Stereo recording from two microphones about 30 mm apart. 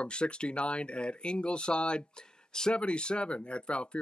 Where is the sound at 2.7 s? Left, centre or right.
Left.